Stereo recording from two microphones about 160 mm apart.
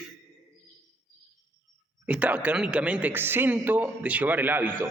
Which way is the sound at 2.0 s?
10° right (ahead or behind).